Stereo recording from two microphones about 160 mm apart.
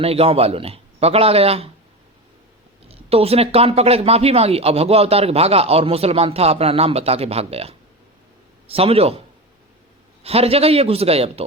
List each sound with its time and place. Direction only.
0.0 s speech: 40° right (ahead or behind)
2.9 s speech: 40° right (ahead or behind)
10.2 s speech: 40° right (ahead or behind)